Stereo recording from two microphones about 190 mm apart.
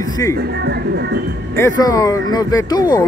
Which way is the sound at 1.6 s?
20° left (ahead or behind).